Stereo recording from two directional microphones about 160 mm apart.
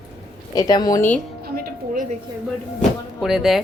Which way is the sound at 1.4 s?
70° right (ahead or behind).